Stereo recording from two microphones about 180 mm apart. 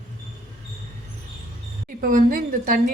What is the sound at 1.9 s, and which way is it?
Speech, 50° right (ahead or behind).